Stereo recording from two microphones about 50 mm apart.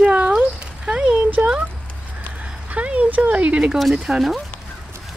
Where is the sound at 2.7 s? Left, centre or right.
Right.